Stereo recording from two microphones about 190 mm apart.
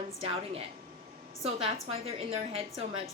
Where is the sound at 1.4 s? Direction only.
30° right (ahead or behind).